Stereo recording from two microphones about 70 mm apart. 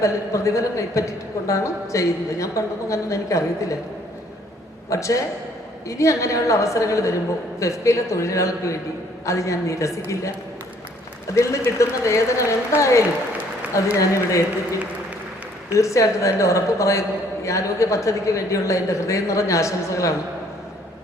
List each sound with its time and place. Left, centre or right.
0.0 s a woman's voice: left
4.9 s a woman's voice: left
15.7 s a woman's voice: left